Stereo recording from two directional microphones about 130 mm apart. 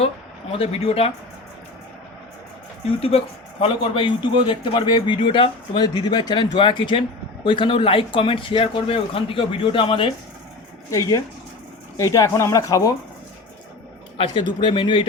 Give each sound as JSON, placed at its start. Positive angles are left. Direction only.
{"t": 0.5, "sound": "speech", "side_deg": 50}
{"t": 3.6, "sound": "speech", "side_deg": 40}
{"t": 10.9, "sound": "speech", "side_deg": 25}
{"t": 14.6, "sound": "speech", "side_deg": 40}